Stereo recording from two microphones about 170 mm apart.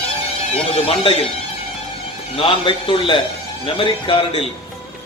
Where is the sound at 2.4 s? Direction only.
30° left (ahead or behind).